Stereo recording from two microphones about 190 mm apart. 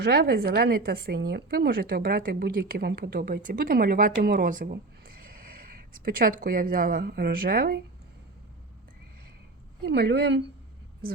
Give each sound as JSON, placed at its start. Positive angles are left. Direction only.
{"t": 0.0, "sound": "a woman's voice", "side_deg": -60}
{"t": 4.7, "sound": "a sound", "side_deg": -50}
{"t": 6.1, "sound": "a woman's voice", "side_deg": -50}
{"t": 9.8, "sound": "a woman's voice", "side_deg": -60}